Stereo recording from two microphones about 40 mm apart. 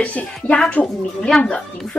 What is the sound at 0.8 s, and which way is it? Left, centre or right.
Speech, left.